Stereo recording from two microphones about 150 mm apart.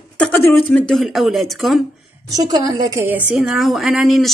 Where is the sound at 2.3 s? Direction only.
25° right (ahead or behind).